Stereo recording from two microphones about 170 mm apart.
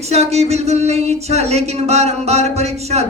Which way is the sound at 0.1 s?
40° right (ahead or behind).